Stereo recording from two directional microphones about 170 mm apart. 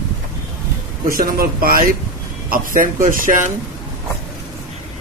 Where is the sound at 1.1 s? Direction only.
55° right (ahead or behind).